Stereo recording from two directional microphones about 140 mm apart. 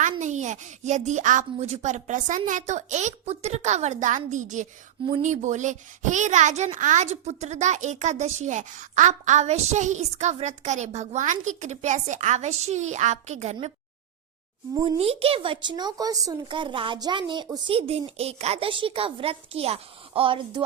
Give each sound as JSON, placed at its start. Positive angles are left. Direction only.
{"t": 0.0, "sound": "a child's voice", "side_deg": -60}
{"t": 14.9, "sound": "a woman's voice", "side_deg": -45}
{"t": 16.5, "sound": "a woman's voice", "side_deg": -35}